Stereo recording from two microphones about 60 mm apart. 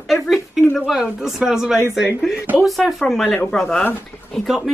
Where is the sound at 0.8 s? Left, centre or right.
Centre.